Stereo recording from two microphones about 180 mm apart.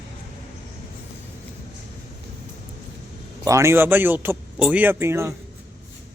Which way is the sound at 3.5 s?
15° right (ahead or behind).